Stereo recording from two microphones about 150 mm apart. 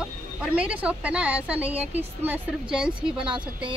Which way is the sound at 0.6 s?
5° right (ahead or behind).